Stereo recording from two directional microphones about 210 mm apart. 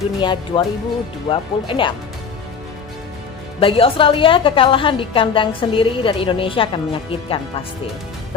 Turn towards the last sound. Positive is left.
turn(degrees=25)  # may be behind; listen again after turning